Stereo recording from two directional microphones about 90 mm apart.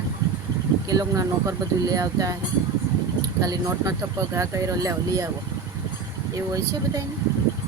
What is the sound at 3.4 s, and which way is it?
Speech, 40° right (ahead or behind).